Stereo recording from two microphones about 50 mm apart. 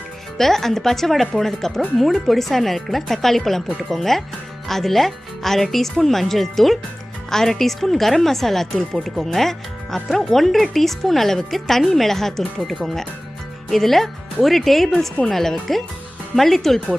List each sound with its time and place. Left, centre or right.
0.4 s speech: centre